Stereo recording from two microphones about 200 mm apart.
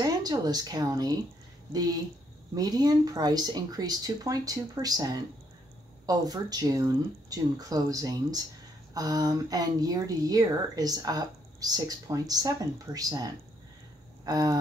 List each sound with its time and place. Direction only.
0.0 s speech: 20° right (ahead or behind)